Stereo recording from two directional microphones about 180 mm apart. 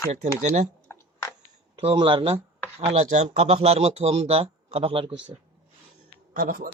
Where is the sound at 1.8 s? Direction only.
30° right (ahead or behind).